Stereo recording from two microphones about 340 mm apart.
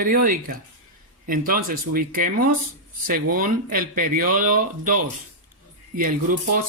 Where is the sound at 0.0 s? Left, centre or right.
Right.